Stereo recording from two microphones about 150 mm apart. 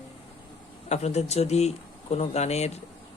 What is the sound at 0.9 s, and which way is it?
Speech, 45° left (ahead or behind).